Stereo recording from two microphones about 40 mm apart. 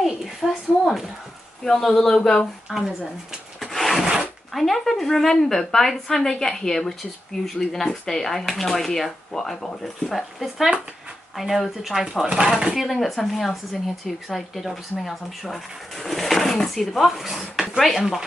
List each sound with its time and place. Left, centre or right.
0.0 s a sound: centre
1.6 s a woman's voice: centre
2.7 s speech: centre
3.6 s rub: centre
4.6 s a woman's voice: centre
11.3 s speech: centre
12.4 s speech: right
12.7 s speech: centre